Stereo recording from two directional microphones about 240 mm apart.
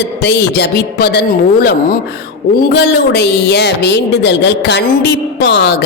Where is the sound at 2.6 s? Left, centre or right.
Left.